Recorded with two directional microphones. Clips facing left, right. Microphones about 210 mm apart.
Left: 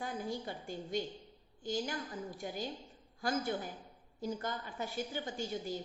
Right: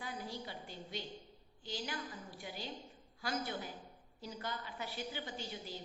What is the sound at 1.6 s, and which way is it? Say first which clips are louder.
A woman's voice: left 6 dB; 45° left (ahead or behind).